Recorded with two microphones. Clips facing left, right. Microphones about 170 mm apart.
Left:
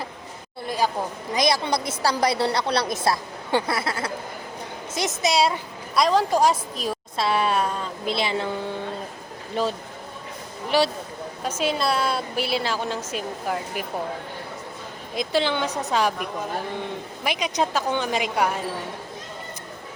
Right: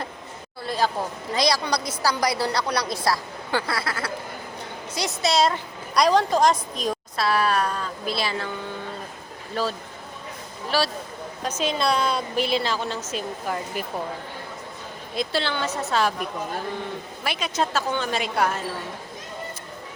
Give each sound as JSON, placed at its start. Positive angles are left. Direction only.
{"t": 0.6, "sound": "a sound", "side_deg": 15}
{"t": 1.3, "sound": "a woman's voice", "side_deg": 20}
{"t": 7.2, "sound": "a woman's voice", "side_deg": 25}
{"t": 9.6, "sound": "a woman's voice", "side_deg": 20}
{"t": 11.4, "sound": "a woman's voice", "side_deg": 10}
{"t": 15.1, "sound": "a woman's voice", "side_deg": 15}
{"t": 17.2, "sound": "a woman's voice", "side_deg": 15}